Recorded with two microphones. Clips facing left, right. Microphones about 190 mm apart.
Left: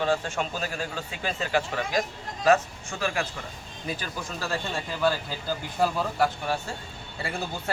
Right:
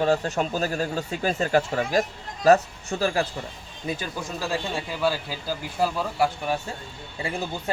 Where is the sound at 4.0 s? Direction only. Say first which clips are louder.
Right 3 dB; 15° right (ahead or behind).